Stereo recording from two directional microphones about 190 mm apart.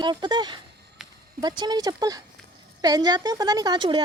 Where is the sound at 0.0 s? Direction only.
25° right (ahead or behind).